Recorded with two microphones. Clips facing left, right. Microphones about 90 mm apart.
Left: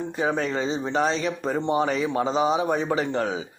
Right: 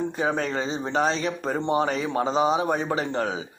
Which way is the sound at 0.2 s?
45° right (ahead or behind).